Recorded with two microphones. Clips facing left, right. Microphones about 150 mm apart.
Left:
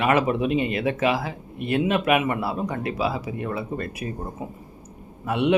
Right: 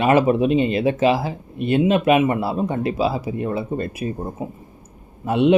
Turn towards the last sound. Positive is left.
turn(degrees=-25)  # may be behind; listen again after turning